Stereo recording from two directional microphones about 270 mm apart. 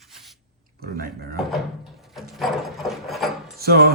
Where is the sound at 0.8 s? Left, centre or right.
Right.